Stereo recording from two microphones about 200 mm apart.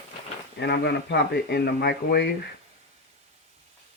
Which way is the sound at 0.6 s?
55° left (ahead or behind).